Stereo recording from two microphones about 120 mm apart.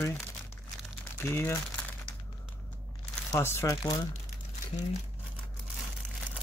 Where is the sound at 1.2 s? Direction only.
20° left (ahead or behind).